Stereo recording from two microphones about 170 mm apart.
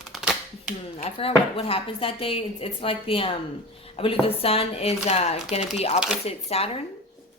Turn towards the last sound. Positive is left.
turn(degrees=35)  # may be behind; listen again after turning